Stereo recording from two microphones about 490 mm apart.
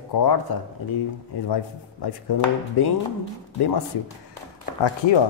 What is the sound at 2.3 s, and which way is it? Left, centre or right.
Speech, left.